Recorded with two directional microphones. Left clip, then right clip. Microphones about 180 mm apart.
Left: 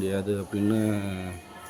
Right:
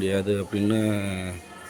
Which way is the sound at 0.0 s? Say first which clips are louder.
Right 4 dB; centre (ahead or behind).